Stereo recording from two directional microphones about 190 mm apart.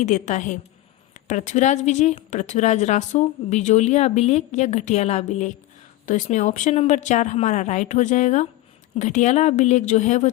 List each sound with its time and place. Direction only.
0.0 s a woman's voice: 40° left (ahead or behind)